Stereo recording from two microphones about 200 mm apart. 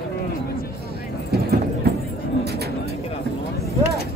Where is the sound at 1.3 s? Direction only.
55° right (ahead or behind).